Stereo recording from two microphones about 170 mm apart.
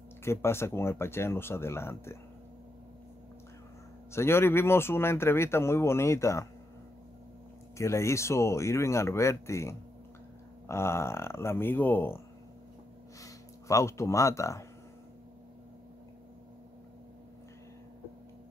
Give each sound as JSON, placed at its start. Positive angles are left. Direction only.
{"t": 0.2, "sound": "speech", "side_deg": 15}
{"t": 4.1, "sound": "speech", "side_deg": 15}
{"t": 7.7, "sound": "speech", "side_deg": 15}
{"t": 13.2, "sound": "speech", "side_deg": 20}